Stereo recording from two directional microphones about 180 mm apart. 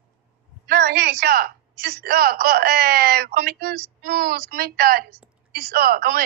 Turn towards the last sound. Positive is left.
turn(degrees=-55)  # may be behind; listen again after turning